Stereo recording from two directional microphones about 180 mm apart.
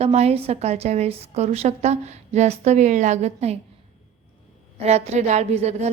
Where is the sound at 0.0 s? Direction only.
35° right (ahead or behind).